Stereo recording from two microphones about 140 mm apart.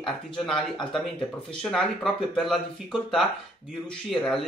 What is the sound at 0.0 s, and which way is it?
Speech, 5° left (ahead or behind).